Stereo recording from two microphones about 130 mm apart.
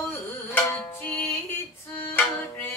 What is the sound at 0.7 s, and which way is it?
Music, 10° left (ahead or behind).